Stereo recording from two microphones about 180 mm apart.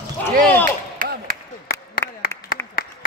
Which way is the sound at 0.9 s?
50° right (ahead or behind).